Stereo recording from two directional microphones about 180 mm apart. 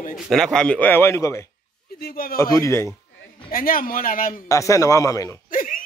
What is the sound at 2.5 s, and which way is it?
Speech, 15° left (ahead or behind).